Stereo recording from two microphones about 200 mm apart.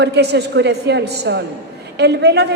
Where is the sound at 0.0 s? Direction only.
55° right (ahead or behind).